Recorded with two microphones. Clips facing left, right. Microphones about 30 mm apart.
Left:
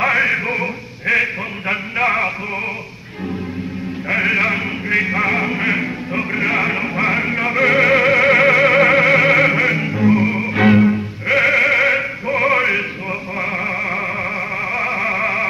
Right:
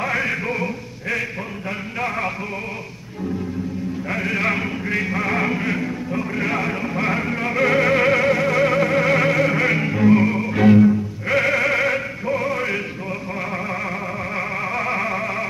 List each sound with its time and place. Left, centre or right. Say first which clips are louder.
0.0 s a sound: left 6 dB; left
4.1 s sheep: left 8 dB; left
4.5 s a sound: left 3 dB; centre
5.6 s music: left 4 dB; left
6.3 s speech: left 6 dB; left
7.0 s music: left 4 dB; left
8.2 s music: left 6 dB; left
9.6 s music: left 2 dB; centre
10.2 s music: left 1 dB; left
11.2 s bleat: left 5 dB; left
12.4 s music: left 10 dB; left
14.3 s music: left 3 dB; centre
15.1 s music: left 6 dB; left